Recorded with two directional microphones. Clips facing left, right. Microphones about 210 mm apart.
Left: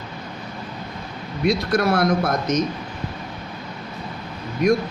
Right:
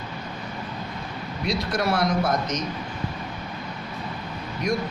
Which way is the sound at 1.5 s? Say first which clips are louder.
Left 6 dB; 50° left (ahead or behind).